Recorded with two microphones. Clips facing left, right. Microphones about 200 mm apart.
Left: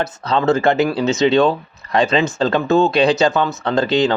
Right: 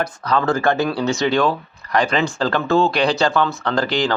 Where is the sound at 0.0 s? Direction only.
25° left (ahead or behind).